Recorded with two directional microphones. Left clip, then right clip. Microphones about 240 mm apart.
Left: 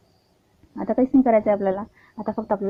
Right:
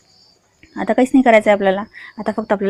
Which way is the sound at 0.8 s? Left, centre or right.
Right.